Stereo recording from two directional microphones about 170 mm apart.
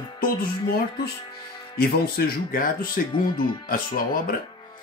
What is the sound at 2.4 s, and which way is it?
Speech, 55° left (ahead or behind).